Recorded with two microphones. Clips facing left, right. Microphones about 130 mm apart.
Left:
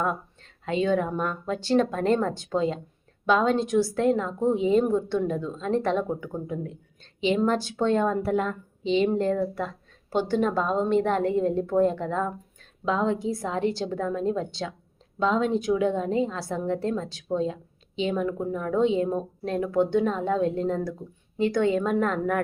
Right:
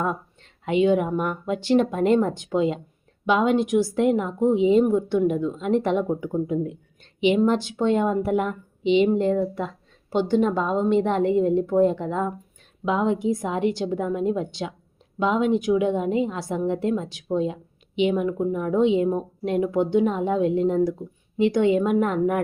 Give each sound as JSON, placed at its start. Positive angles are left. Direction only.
{"t": 0.6, "sound": "a woman's voice", "side_deg": -20}